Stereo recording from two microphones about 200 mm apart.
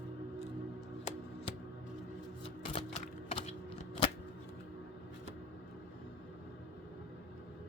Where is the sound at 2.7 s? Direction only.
30° left (ahead or behind).